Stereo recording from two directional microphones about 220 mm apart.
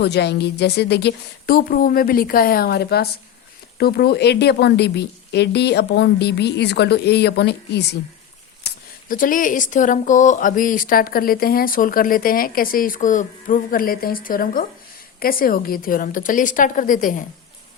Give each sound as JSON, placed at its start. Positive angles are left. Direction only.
{"t": 0.0, "sound": "a woman's voice", "side_deg": 50}
{"t": 8.6, "sound": "speech", "side_deg": 40}